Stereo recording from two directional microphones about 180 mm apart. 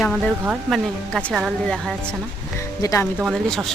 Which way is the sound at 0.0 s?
Centre (ahead or behind).